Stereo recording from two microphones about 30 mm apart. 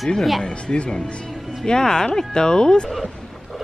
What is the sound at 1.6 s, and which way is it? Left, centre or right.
Speech, left.